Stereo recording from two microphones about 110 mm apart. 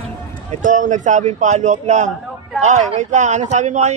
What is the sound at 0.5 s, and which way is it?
Run, 90° right.